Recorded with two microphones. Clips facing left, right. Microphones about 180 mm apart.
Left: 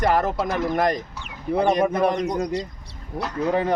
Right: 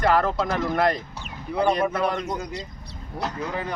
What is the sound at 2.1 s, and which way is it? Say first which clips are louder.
Speech: left 4 dB; 15° left (ahead or behind).